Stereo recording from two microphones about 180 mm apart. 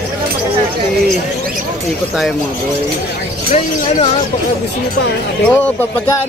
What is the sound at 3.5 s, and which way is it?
Speech, 40° left (ahead or behind).